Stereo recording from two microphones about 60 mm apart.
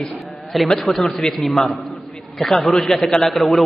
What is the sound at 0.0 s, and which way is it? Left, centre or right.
A man's voice, centre.